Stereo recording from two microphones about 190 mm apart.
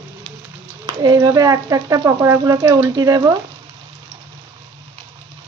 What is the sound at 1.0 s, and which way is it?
Speech, 20° right (ahead or behind).